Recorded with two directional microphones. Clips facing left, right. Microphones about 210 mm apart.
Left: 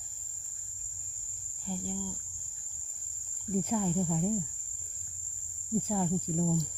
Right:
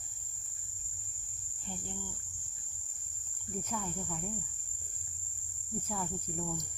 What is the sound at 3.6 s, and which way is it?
Speech, 30° left (ahead or behind).